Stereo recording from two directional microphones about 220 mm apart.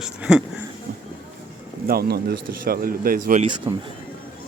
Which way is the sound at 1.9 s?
45° right (ahead or behind).